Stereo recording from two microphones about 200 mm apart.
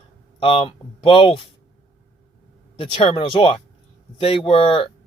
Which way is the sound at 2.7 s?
25° left (ahead or behind).